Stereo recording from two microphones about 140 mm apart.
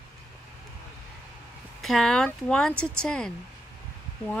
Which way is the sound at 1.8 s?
5° left (ahead or behind).